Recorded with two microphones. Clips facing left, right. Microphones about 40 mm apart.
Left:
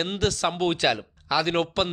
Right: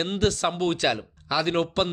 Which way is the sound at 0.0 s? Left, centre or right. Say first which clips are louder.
Right 1 dB; centre.